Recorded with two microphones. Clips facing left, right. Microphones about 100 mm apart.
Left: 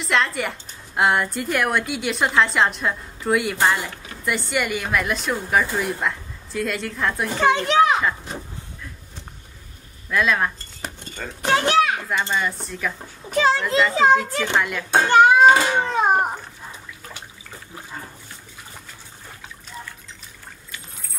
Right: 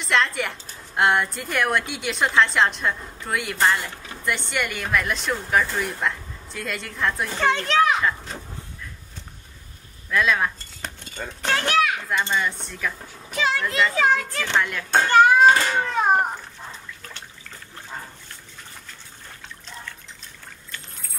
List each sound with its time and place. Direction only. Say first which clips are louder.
0.0 s speech: left 1 dB; centre (ahead or behind)
7.2 s speech: left 6 dB; 10° left (ahead or behind)
10.0 s cutlery: left 1 dB; centre (ahead or behind)
11.4 s a child's voice: left 3 dB; 20° left (ahead or behind)
12.1 s speech: left 1 dB; centre (ahead or behind)
13.3 s a child's voice: left 5 dB; 35° left (ahead or behind)
14.4 s speech: left 2 dB; 5° left (ahead or behind)
17.1 s water: left 2 dB; 10° left (ahead or behind)